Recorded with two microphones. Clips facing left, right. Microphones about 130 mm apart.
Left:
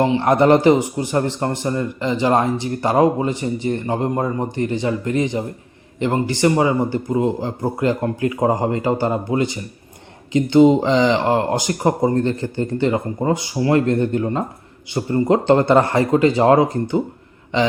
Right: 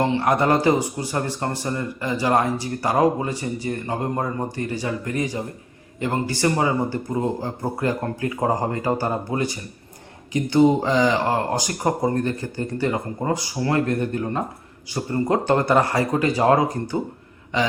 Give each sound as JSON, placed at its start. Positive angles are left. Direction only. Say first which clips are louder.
{"t": 0.0, "sound": "a man's voice", "louder": "left 5 dB", "side_deg": 20}